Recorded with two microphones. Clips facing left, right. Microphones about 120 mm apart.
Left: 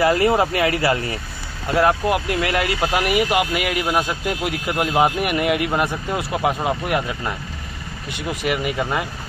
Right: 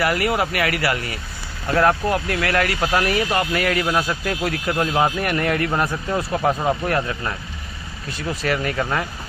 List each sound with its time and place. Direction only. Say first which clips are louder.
0.0 s speech: left 4 dB; 25° left (ahead or behind)
1.8 s speech: left 1 dB; 10° left (ahead or behind)
8.4 s speech: even; 15° left (ahead or behind)